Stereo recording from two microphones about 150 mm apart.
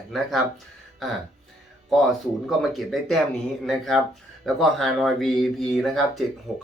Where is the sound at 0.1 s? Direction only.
Centre (ahead or behind).